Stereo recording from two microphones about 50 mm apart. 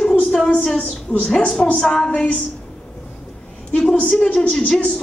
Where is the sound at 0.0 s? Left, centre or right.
Centre.